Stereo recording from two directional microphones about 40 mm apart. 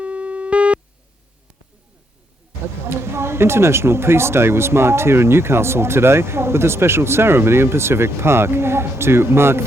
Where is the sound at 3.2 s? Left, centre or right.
Right.